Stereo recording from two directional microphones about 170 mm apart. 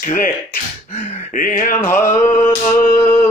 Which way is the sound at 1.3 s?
50° left (ahead or behind).